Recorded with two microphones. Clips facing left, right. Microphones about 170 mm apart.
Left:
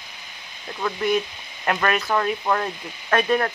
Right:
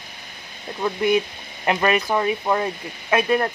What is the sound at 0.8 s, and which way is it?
Speech, 10° right (ahead or behind).